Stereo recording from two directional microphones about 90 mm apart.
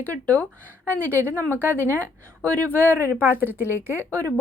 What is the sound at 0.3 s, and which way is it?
Speech, 15° left (ahead or behind).